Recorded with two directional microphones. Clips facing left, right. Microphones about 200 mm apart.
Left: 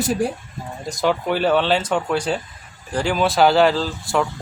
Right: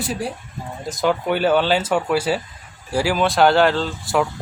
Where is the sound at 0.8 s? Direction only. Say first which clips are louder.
Even; centre (ahead or behind).